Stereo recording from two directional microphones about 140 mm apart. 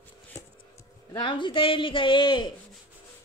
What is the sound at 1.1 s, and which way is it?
A man's voice, 35° left (ahead or behind).